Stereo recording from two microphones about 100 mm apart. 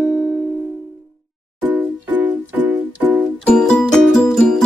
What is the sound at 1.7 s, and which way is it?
Music, 15° right (ahead or behind).